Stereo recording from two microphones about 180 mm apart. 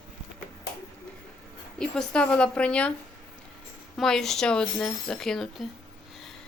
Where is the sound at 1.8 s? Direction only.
5° left (ahead or behind).